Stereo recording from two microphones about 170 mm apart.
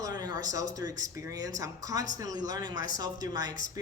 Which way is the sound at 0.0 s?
25° right (ahead or behind).